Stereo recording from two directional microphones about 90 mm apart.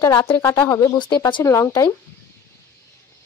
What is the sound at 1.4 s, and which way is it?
Speech, 35° left (ahead or behind).